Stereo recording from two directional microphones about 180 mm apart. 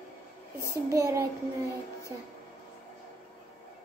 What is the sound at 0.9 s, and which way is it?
Speech, 15° right (ahead or behind).